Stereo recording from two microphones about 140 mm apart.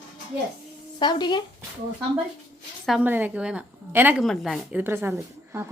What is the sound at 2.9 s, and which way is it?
A woman's voice, 10° right (ahead or behind).